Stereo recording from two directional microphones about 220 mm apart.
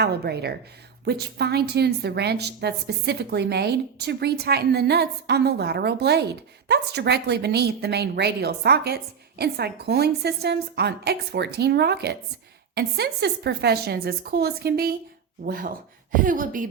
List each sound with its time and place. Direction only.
0.0 s a woman's voice: 45° right (ahead or behind)